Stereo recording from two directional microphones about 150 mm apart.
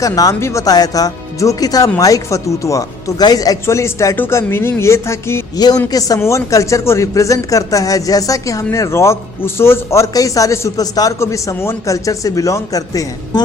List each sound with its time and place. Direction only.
0.0 s speech: 20° left (ahead or behind)